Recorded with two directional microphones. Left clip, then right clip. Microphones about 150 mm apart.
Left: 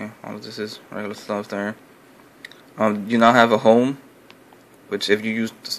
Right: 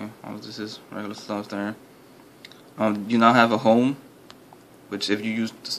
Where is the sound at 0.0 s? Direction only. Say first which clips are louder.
Left 3 dB; 20° left (ahead or behind).